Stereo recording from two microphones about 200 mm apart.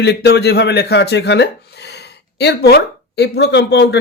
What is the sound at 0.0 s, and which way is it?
Speech, 55° left (ahead or behind).